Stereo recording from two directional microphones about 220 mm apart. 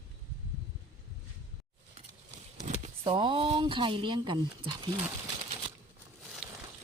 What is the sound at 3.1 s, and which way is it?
Speech, 25° right (ahead or behind).